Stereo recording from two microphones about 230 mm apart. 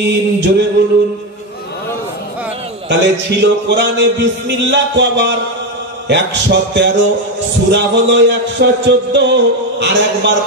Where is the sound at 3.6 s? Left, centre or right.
Right.